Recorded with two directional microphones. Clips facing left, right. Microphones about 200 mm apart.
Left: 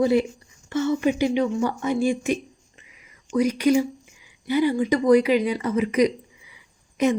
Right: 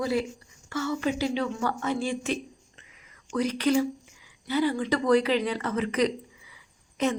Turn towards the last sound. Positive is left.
turn(degrees=15)  # may be behind; listen again after turning